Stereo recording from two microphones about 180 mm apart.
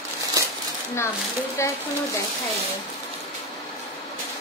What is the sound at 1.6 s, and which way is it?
Speech, 15° left (ahead or behind).